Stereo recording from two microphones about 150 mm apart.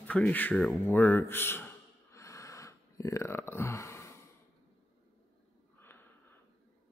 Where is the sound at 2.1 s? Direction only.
20° left (ahead or behind).